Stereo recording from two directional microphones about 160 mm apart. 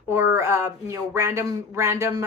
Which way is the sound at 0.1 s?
15° right (ahead or behind).